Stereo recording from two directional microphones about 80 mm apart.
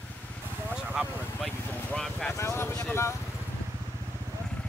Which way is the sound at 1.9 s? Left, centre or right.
Centre.